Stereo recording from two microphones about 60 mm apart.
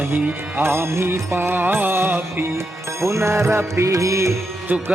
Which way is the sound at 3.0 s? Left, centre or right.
Right.